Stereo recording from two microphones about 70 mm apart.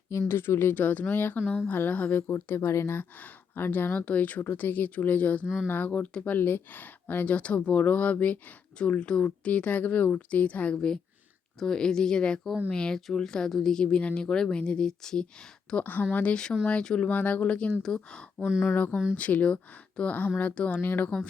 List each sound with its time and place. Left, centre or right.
0.1 s speech: left
2.2 s a woman's voice: left; by 15.8 s centre
15.8 s speech: left
16.1 s a woman's voice: centre
19.1 s speech: left
20.8 s speech: left